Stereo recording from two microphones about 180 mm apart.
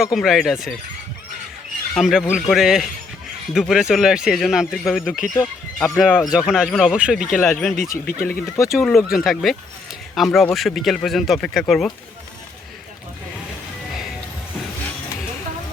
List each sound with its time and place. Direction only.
0.0 s speech: centre (ahead or behind)
2.0 s speech: centre (ahead or behind)
5.4 s speech: 15° left (ahead or behind)
6.0 s speech: 5° right (ahead or behind)
7.3 s speech: 10° left (ahead or behind)
7.9 s speech: 50° left (ahead or behind)
8.3 s speech: 15° left (ahead or behind)
9.0 s speech: centre (ahead or behind)